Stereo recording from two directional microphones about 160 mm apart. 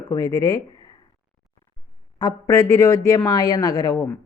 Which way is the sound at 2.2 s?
20° left (ahead or behind).